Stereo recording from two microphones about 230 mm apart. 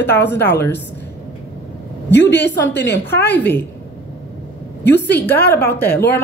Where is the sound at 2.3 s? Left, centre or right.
Left.